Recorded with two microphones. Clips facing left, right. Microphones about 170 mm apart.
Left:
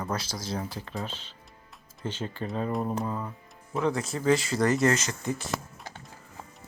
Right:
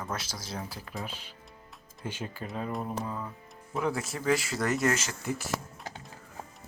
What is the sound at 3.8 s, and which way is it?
Speech, 5° right (ahead or behind).